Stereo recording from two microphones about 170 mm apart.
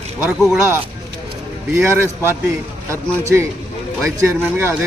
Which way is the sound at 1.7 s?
15° right (ahead or behind).